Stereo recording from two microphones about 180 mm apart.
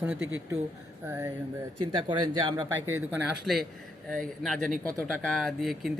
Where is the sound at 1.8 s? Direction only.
25° right (ahead or behind).